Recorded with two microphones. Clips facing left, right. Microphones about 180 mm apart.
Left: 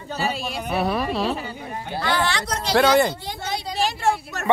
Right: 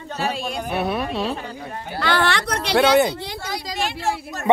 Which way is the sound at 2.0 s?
60° right (ahead or behind).